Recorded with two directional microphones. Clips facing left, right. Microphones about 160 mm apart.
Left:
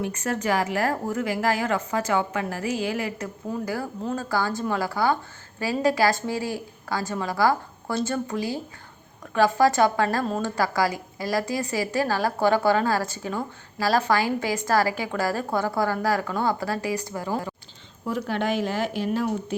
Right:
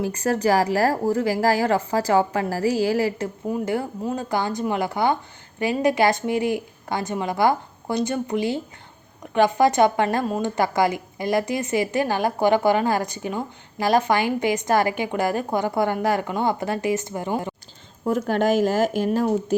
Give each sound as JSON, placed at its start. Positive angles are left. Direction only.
{"t": 0.0, "sound": "a woman's voice", "side_deg": -35}
{"t": 3.5, "sound": "a woman's voice", "side_deg": -25}
{"t": 18.0, "sound": "speech", "side_deg": -45}